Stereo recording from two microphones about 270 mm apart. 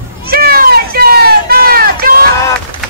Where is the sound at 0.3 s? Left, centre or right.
Right.